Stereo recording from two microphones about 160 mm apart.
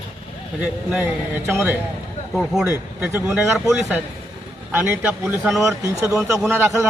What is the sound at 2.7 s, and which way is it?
Speech, 15° right (ahead or behind).